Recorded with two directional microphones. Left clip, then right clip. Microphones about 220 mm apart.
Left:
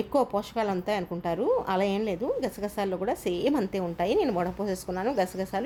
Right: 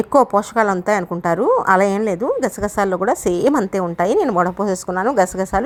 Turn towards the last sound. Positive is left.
turn(degrees=-30)  # may be behind; listen again after turning